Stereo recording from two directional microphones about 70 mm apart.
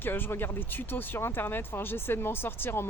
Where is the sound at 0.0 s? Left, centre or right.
Left.